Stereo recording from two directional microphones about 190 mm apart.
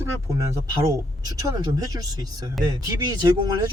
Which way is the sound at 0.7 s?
20° right (ahead or behind).